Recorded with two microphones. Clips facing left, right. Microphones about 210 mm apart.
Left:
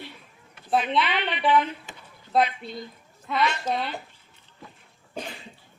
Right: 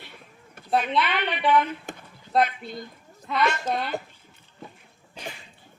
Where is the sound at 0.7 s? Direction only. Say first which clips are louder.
Even; centre (ahead or behind).